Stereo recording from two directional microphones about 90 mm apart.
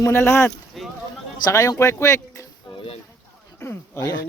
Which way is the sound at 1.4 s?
35° left (ahead or behind).